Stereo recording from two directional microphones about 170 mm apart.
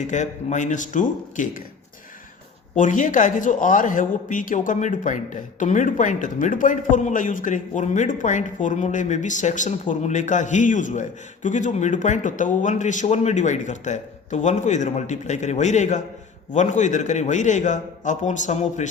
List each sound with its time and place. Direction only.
0.1 s a man's voice: 45° left (ahead or behind)
2.7 s a man's voice: 50° left (ahead or behind)